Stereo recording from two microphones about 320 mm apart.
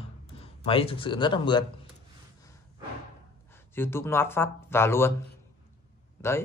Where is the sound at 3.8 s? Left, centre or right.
Centre.